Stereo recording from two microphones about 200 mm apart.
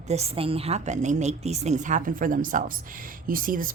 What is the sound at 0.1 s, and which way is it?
A woman's voice, 30° right (ahead or behind).